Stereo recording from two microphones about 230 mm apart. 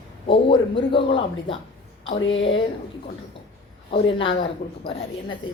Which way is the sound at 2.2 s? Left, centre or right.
Left.